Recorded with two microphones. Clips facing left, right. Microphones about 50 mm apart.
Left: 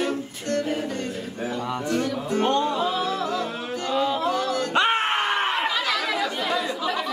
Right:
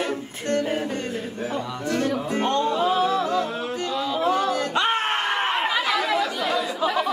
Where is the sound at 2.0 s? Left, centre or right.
Right.